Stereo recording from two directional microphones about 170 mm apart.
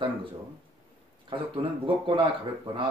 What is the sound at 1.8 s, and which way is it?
Speech, 30° right (ahead or behind).